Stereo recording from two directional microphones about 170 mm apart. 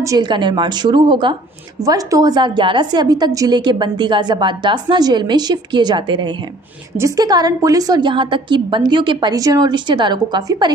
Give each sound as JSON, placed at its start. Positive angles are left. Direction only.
{"t": 0.0, "sound": "a woman's voice", "side_deg": -25}